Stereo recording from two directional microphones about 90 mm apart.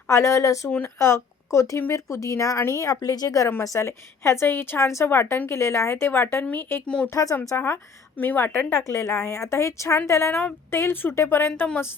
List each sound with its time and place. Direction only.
0.1 s a woman's voice: 30° left (ahead or behind)
6.8 s speech: 10° left (ahead or behind)
7.1 s a woman's voice: 35° left (ahead or behind)
7.3 s a woman's voice: 25° left (ahead or behind)